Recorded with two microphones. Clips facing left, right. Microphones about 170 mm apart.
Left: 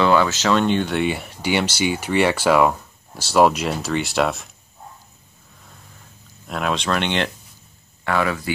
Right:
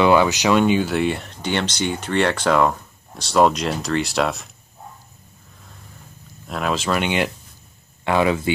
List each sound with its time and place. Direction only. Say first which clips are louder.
0.0 s speech: right 2 dB; 15° right (ahead or behind); by 4.5 s centre (ahead or behind)
6.4 s speech: even; centre (ahead or behind)
8.0 s speech: right 3 dB; 20° right (ahead or behind)